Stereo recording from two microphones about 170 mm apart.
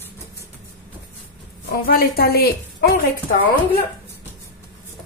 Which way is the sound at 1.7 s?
60° left (ahead or behind).